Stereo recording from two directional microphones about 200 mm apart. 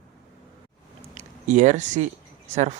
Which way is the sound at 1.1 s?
40° right (ahead or behind).